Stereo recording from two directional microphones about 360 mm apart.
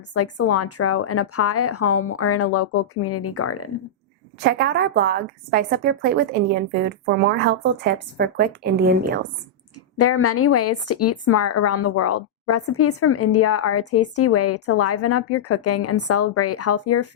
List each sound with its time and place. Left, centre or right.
0.1 s speech: left
4.4 s a woman's voice: right
10.0 s speech: left